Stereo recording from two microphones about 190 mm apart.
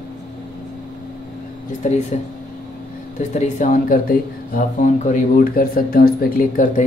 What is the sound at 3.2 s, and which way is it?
Speech, 40° left (ahead or behind).